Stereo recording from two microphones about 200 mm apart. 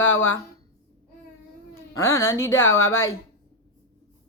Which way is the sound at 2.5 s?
80° left.